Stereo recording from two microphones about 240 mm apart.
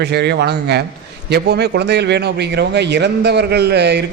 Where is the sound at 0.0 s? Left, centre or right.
Right.